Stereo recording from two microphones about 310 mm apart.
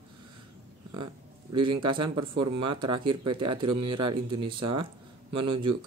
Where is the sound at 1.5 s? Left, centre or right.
Centre.